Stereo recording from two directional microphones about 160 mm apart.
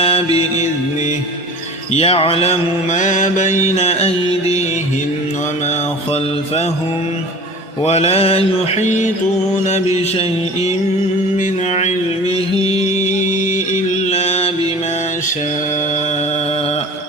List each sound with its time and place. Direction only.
0.0 s mantra: 40° left (ahead or behind)
1.9 s mantra: 40° left (ahead or behind)
7.9 s mantra: 40° left (ahead or behind)
11.3 s mantra: 45° left (ahead or behind)
12.5 s music: 40° left (ahead or behind)
14.1 s mantra: 40° left (ahead or behind)